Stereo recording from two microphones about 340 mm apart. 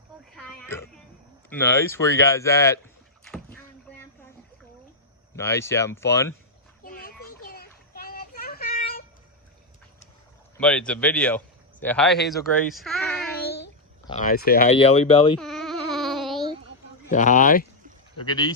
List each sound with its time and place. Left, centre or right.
0.3 s speech: centre
3.3 s rowboat: centre
5.4 s speech: centre
6.8 s children playing: left
10.6 s speech: centre
14.1 s speech: left
15.4 s a sound: centre
17.1 s speech: left
18.2 s speech: centre